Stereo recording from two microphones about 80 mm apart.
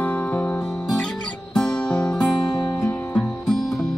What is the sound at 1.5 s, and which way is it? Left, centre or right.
Music, centre.